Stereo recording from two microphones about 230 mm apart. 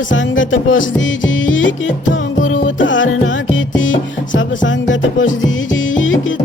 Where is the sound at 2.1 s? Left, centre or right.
Left.